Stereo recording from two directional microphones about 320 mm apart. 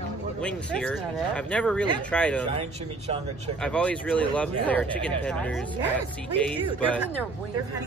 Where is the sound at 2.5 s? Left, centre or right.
Centre.